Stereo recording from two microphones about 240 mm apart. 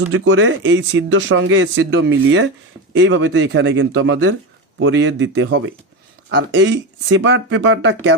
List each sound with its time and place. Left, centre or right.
0.1 s speech: right